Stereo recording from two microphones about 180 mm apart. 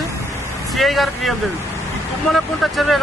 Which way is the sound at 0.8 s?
Centre (ahead or behind).